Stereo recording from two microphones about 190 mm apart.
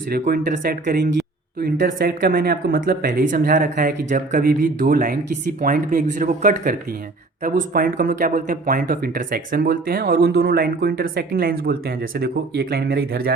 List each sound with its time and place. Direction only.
0.1 s speech: 50° right (ahead or behind)